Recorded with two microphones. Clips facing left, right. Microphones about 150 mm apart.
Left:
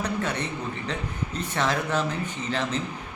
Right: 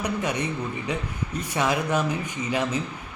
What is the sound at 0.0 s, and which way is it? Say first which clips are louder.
A man's voice: right 2 dB; 15° right (ahead or behind).